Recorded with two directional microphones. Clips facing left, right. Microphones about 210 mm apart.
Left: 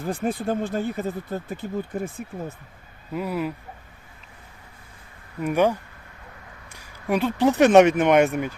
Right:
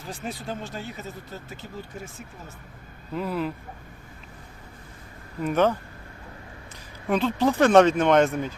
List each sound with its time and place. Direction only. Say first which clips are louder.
0.0 s speech: left 9 dB; 55° left (ahead or behind)
3.1 s speech: left 1 dB; 5° left (ahead or behind)
5.4 s speech: left 1 dB; 10° left (ahead or behind)
7.1 s speech: left 2 dB; 15° left (ahead or behind)